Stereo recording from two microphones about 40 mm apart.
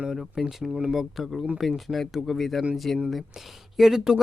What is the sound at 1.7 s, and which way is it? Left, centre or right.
Speech, centre.